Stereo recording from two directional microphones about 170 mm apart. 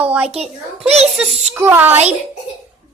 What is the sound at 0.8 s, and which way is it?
Speech, 35° right (ahead or behind).